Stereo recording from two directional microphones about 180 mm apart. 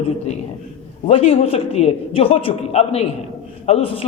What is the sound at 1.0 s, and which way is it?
A man's voice, 35° left (ahead or behind).